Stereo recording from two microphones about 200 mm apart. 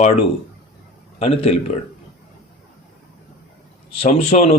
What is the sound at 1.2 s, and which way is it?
Speech, 30° left (ahead or behind).